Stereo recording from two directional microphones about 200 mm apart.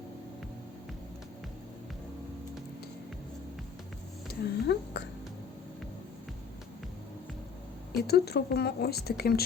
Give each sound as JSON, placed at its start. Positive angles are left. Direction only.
{"t": 4.3, "sound": "speech", "side_deg": 55}
{"t": 7.9, "sound": "speech", "side_deg": 55}